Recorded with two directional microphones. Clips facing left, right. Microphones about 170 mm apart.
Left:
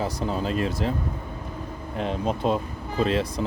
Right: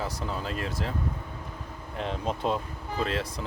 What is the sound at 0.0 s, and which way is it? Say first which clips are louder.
Speech: left 6 dB; 20° left (ahead or behind).